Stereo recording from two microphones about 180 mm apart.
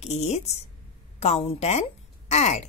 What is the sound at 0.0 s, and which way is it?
A woman's voice, 40° left (ahead or behind).